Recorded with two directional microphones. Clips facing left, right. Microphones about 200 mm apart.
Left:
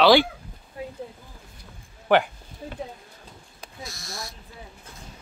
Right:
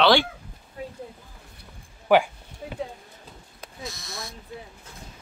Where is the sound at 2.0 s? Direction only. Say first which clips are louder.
Right 1 dB; 10° right (ahead or behind).